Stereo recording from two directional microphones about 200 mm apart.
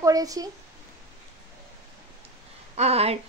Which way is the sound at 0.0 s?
15° right (ahead or behind).